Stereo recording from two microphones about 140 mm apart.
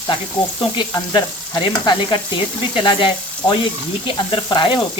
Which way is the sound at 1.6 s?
35° left (ahead or behind).